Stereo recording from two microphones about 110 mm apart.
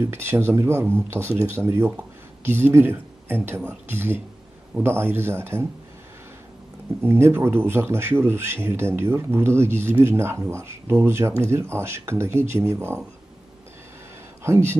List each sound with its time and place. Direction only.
0.0 s speech: 20° right (ahead or behind)
2.5 s speech: 20° right (ahead or behind)
7.0 s speech: 25° right (ahead or behind)
14.4 s speech: 25° right (ahead or behind)